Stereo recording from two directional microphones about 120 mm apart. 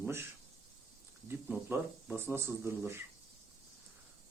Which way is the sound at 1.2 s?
15° right (ahead or behind).